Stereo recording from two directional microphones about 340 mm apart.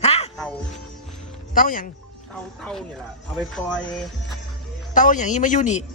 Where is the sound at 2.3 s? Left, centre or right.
Centre.